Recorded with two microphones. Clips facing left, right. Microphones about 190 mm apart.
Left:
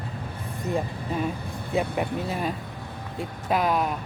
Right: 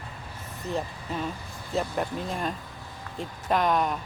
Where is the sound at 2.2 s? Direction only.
5° left (ahead or behind).